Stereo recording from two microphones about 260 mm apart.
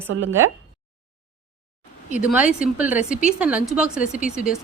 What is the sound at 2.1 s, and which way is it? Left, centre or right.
A woman's voice, centre.